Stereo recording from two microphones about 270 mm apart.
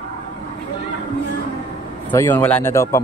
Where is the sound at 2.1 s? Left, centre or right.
Centre.